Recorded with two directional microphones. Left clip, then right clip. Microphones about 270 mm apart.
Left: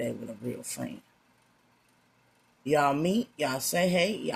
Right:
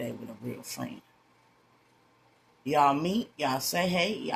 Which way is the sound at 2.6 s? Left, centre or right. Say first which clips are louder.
Right 1 dB; left.